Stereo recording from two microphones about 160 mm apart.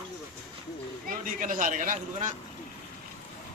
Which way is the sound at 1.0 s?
55° right (ahead or behind).